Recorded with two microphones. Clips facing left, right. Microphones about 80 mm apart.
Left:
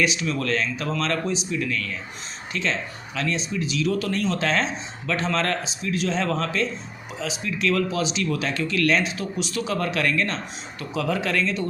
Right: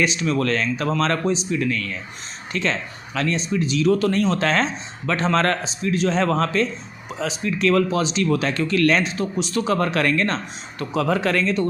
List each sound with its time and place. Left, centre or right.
0.0 s speech: right